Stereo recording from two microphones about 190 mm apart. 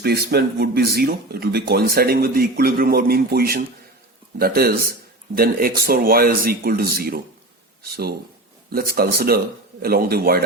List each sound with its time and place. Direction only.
0.0 s a man's voice: 55° right (ahead or behind)